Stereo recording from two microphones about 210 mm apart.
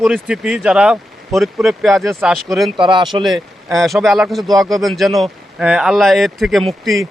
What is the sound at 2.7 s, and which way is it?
Speech, 20° right (ahead or behind).